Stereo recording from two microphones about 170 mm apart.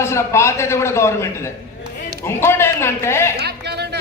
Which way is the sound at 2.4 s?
15° left (ahead or behind).